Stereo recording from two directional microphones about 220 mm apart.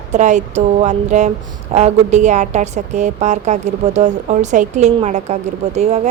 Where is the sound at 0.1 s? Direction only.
35° right (ahead or behind).